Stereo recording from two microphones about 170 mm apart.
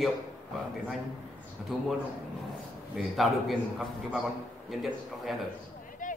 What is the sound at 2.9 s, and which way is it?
A man's voice, centre (ahead or behind).